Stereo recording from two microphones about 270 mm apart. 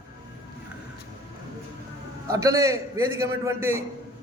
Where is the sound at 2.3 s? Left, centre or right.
Centre.